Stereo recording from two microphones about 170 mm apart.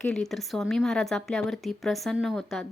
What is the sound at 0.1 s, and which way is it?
A woman's voice, centre (ahead or behind).